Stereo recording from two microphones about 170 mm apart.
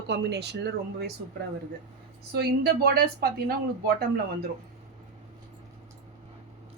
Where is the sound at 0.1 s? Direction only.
75° right (ahead or behind).